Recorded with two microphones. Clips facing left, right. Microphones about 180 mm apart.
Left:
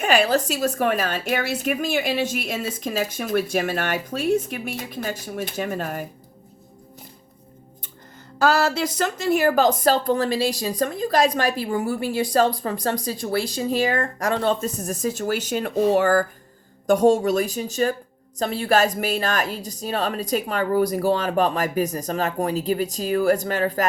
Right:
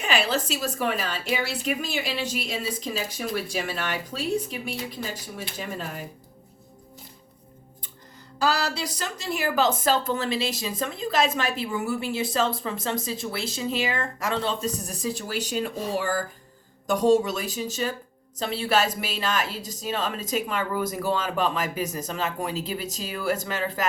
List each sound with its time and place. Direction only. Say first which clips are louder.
0.0 s a woman's voice: left 6 dB; 45° left (ahead or behind)
8.4 s a woman's voice: left 6 dB; 50° left (ahead or behind); by 16.2 s 70° left (ahead or behind)
16.8 s a woman's voice: left 3 dB; 45° left (ahead or behind)